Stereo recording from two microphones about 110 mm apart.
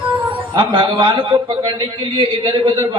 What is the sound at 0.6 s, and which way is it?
A man's voice, 45° right (ahead or behind).